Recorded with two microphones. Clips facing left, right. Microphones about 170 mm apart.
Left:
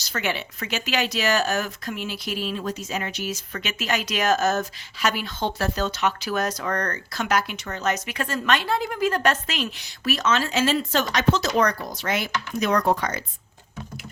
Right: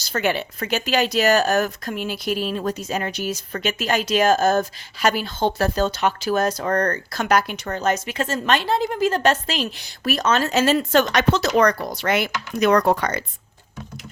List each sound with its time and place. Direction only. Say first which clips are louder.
0.1 s speech: right 5 dB; 40° right (ahead or behind); by 13.2 s 65° right (ahead or behind)